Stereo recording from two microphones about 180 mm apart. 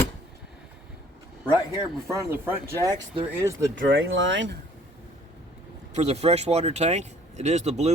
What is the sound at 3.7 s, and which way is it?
Speech, 90° right.